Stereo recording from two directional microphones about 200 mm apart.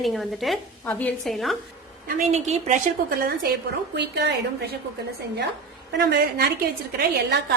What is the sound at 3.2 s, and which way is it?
A woman's voice, 50° right (ahead or behind).